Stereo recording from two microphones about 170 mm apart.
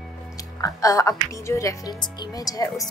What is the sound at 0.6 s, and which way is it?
Speech, 20° left (ahead or behind).